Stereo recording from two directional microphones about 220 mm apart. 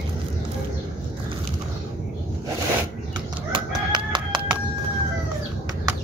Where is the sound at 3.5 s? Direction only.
20° right (ahead or behind).